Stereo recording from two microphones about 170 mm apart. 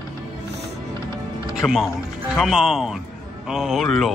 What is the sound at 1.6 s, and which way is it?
Speech, centre (ahead or behind).